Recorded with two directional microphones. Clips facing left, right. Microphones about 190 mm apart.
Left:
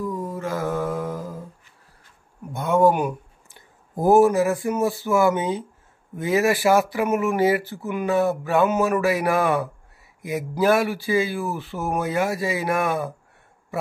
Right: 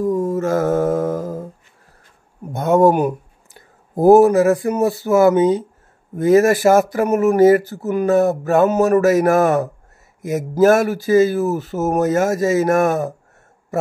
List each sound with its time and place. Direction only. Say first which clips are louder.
0.0 s mantra: right 9 dB; 45° right (ahead or behind)
2.5 s a sound: right 5 dB; 40° right (ahead or behind)
3.9 s speech: right 6 dB; 40° right (ahead or behind)